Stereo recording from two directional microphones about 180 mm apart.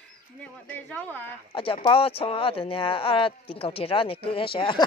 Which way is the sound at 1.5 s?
30° left (ahead or behind).